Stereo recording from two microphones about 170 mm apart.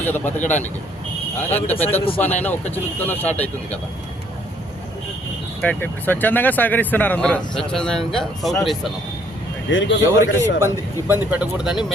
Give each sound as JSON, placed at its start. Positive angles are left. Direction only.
{"t": 0.0, "sound": "speech", "side_deg": 10}
{"t": 1.5, "sound": "speech", "side_deg": 10}
{"t": 5.6, "sound": "speech", "side_deg": 10}
{"t": 9.6, "sound": "a man's voice", "side_deg": 90}
{"t": 10.3, "sound": "a man's voice", "side_deg": -15}